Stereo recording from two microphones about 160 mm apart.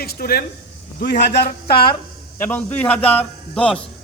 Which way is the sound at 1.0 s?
90° left.